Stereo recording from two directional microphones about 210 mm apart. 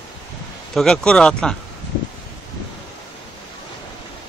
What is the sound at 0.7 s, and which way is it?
Speech, 5° left (ahead or behind).